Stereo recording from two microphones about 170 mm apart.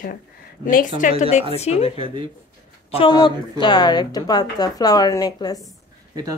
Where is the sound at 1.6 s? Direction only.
40° left (ahead or behind).